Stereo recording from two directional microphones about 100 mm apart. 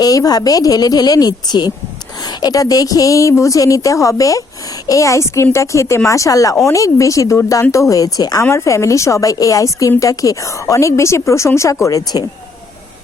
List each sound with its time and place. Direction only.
0.0 s a woman's voice: 40° left (ahead or behind)